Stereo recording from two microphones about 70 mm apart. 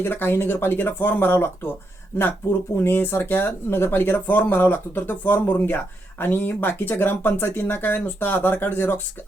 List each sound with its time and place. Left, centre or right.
0.0 s speech: left
2.8 s speech: left